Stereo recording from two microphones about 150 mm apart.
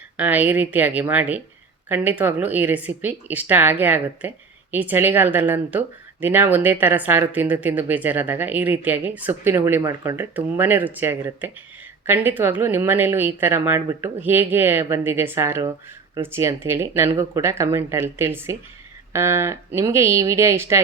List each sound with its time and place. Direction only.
0.2 s speech: 10° right (ahead or behind)